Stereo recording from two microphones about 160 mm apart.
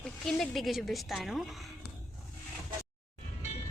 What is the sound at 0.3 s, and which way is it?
A woman's voice, centre (ahead or behind).